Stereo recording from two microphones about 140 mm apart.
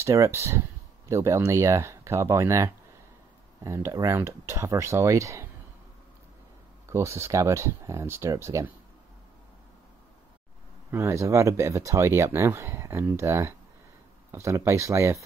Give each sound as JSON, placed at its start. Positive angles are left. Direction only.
{"t": 0.0, "sound": "speech", "side_deg": -20}
{"t": 6.9, "sound": "speech", "side_deg": -20}
{"t": 10.9, "sound": "speech", "side_deg": -20}